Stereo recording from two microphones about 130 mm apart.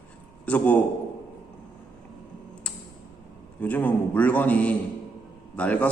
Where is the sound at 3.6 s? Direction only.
10° left (ahead or behind).